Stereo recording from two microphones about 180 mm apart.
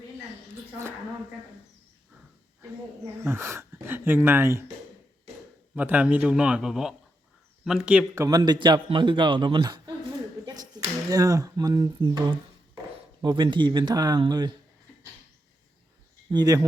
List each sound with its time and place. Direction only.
3.2 s speech: 15° right (ahead or behind)
5.7 s speech: 10° right (ahead or behind)
8.1 s a man's voice: 20° right (ahead or behind)
10.4 s clapping: 20° right (ahead or behind)
11.1 s a man's voice: 20° right (ahead or behind)
16.3 s a man's voice: 20° right (ahead or behind)